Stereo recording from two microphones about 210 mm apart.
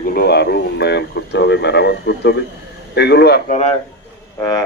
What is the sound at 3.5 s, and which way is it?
Speech, 30° left (ahead or behind).